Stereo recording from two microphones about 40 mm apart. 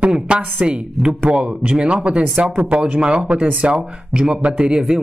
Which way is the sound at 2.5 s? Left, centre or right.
Right.